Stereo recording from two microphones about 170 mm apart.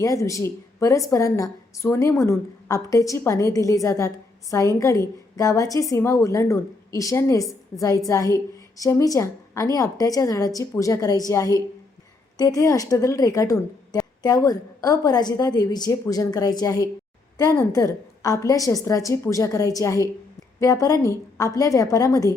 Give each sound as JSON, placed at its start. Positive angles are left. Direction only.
{"t": 0.0, "sound": "a woman's voice", "side_deg": 20}